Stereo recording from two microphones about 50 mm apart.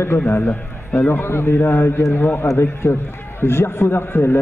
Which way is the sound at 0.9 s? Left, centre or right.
Left.